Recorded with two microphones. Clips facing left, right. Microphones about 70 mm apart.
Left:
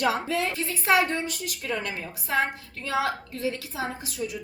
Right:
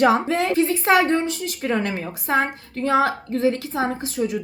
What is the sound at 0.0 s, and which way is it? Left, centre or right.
Speech, right.